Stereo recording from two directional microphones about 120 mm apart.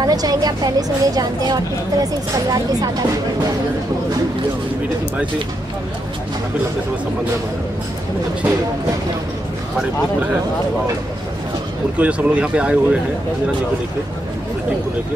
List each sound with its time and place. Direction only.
0.0 s a woman's voice: 30° right (ahead or behind)
9.8 s speech: 10° right (ahead or behind)
12.0 s speech: 10° right (ahead or behind)